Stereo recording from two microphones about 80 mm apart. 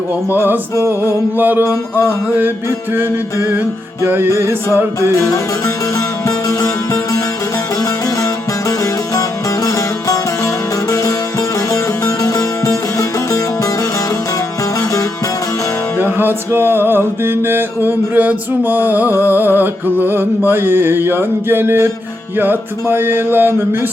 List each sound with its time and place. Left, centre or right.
0.8 s music: right
1.4 s music: right
1.6 s music: left
4.0 s music: right
4.7 s music: left
9.6 s music: left
11.7 s music: left
16.0 s music: right